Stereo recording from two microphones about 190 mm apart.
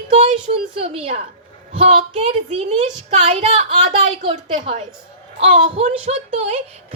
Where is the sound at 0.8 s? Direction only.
30° right (ahead or behind).